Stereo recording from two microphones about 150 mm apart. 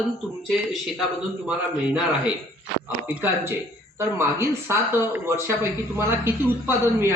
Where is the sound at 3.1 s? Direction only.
15° right (ahead or behind).